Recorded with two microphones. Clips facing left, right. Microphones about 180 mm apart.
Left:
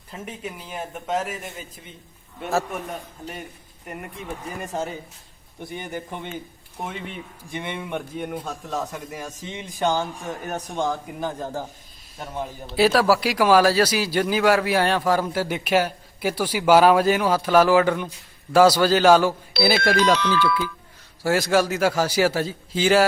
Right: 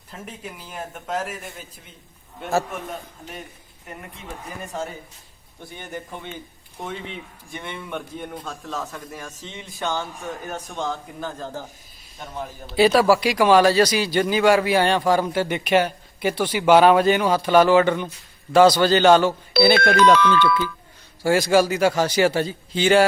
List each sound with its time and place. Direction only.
0.1 s speech: 5° left (ahead or behind)
5.5 s a man's voice: 15° left (ahead or behind)
7.5 s a man's voice: 15° left (ahead or behind)
12.6 s speech: centre (ahead or behind)
21.2 s speech: centre (ahead or behind)